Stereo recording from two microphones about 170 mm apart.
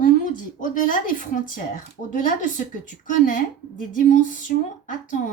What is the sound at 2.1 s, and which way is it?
Speech, 50° left (ahead or behind).